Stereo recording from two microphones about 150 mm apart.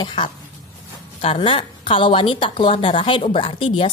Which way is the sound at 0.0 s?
30° left (ahead or behind).